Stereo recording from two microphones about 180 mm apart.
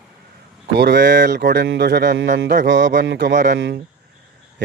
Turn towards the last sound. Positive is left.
turn(degrees=-45)  # may be behind; listen again after turning